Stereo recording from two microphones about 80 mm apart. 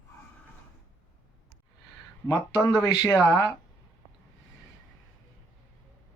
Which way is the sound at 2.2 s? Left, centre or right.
Left.